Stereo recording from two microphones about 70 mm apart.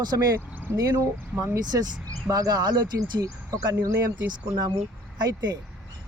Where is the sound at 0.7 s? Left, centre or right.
Right.